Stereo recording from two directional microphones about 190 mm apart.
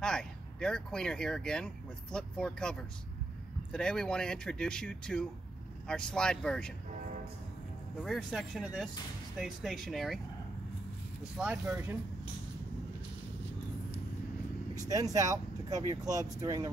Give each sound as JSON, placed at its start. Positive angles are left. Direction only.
{"t": 0.0, "sound": "speech", "side_deg": 5}
{"t": 8.0, "sound": "speech", "side_deg": 0}
{"t": 11.3, "sound": "speech", "side_deg": -5}
{"t": 14.9, "sound": "speech", "side_deg": -20}